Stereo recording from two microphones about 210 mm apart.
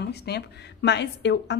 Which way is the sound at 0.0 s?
50° left (ahead or behind).